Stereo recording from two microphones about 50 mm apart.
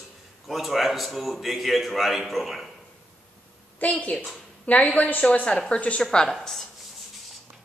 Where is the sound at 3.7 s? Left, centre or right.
Left.